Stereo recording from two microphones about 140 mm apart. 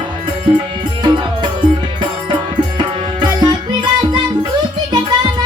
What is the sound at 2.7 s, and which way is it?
Music, 30° right (ahead or behind).